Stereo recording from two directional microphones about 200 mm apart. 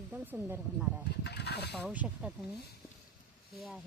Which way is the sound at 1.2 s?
55° left (ahead or behind).